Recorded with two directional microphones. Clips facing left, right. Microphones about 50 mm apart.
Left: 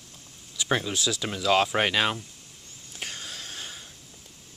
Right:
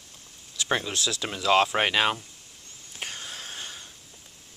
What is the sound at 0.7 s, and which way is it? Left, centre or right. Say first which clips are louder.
Speech: left 1 dB; centre.